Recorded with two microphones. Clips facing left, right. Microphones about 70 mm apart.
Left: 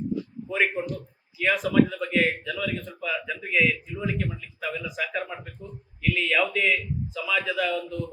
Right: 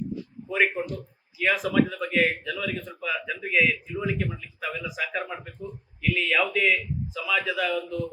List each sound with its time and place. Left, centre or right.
0.4 s speech: centre